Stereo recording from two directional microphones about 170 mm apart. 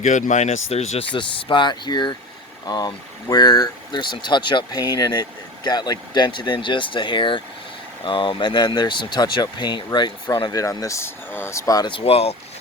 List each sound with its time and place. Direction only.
0.0 s speech: 45° left (ahead or behind)